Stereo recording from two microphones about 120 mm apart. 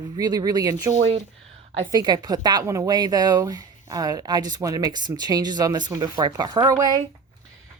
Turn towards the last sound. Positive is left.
turn(degrees=-30)  # may be behind; listen again after turning